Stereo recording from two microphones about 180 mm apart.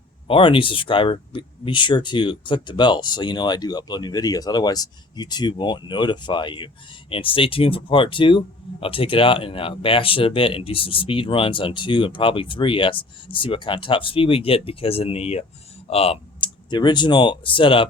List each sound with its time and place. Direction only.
0.3 s speech: 30° left (ahead or behind)